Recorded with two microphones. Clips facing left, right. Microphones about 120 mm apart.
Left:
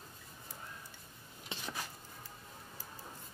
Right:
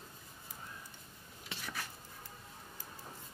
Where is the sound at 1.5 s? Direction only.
20° left (ahead or behind).